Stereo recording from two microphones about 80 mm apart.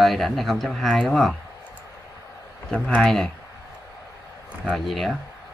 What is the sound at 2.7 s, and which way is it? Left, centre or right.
Speech, centre.